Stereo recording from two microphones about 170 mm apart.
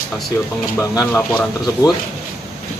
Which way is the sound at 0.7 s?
20° left (ahead or behind).